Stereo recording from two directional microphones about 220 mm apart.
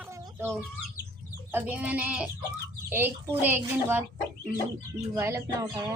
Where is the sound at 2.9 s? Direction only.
10° right (ahead or behind).